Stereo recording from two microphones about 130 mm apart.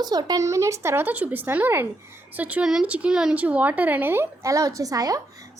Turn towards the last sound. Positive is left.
turn(degrees=-30)  # may be behind; listen again after turning